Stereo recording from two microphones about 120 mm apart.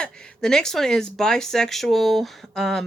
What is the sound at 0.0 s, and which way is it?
Speech, 5° left (ahead or behind).